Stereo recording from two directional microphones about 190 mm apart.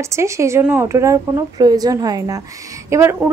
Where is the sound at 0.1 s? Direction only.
15° right (ahead or behind).